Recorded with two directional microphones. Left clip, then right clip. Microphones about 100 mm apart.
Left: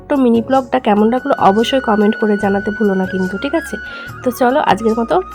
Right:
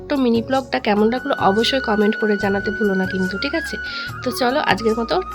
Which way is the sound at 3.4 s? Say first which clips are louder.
Left 4 dB; 40° left (ahead or behind).